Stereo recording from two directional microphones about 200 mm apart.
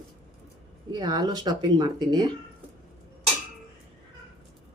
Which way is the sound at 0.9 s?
20° right (ahead or behind).